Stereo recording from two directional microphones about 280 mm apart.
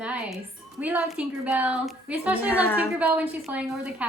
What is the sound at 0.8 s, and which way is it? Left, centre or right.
A woman's voice, centre.